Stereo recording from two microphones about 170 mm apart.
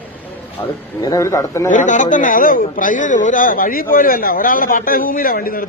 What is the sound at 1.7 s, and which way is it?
A man's voice, 45° left (ahead or behind).